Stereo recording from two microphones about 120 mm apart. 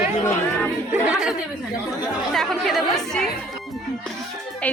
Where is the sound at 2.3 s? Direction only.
Centre (ahead or behind).